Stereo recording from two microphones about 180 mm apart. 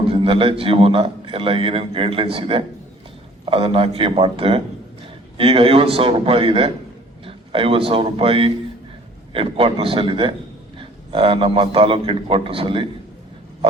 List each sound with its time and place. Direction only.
0.0 s a man's voice: 30° right (ahead or behind)